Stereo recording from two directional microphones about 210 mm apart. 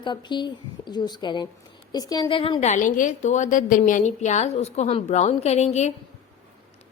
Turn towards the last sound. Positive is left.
turn(degrees=30)  # may be behind; listen again after turning